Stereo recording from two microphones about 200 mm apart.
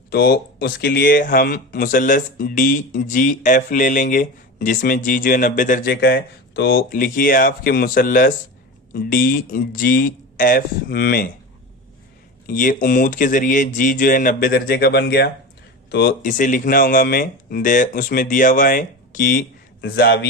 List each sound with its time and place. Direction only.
0.1 s speech: 50° left (ahead or behind)
12.5 s speech: 45° left (ahead or behind)
19.8 s a man's voice: 60° left (ahead or behind)